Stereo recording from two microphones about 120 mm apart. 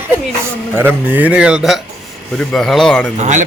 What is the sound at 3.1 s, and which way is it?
Speech, 75° right (ahead or behind).